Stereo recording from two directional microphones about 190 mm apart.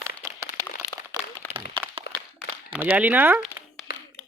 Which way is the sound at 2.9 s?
10° right (ahead or behind).